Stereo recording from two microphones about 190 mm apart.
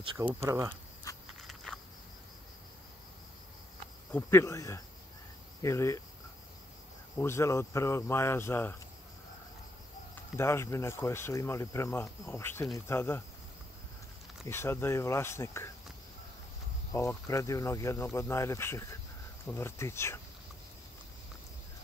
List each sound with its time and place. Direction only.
0.2 s speech: 15° right (ahead or behind)
1.1 s a sound: 20° left (ahead or behind)
1.5 s insect: centre (ahead or behind)
4.1 s speech: 15° left (ahead or behind)
7.2 s speech: 15° left (ahead or behind)
10.3 s speech: 15° left (ahead or behind)
14.5 s speech: 15° left (ahead or behind)
16.9 s speech: 15° left (ahead or behind)